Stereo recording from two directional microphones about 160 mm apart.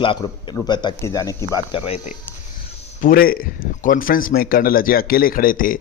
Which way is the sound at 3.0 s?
65° left (ahead or behind).